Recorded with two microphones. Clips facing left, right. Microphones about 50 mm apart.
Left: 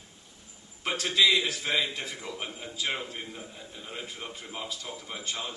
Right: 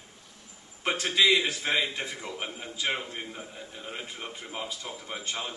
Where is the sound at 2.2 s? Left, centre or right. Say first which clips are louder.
Right 1 dB; right.